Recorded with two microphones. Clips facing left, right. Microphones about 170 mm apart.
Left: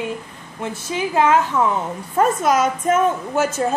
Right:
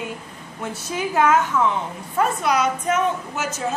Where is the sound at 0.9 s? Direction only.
25° left (ahead or behind).